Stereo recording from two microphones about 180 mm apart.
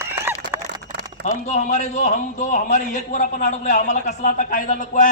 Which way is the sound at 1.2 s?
40° left (ahead or behind).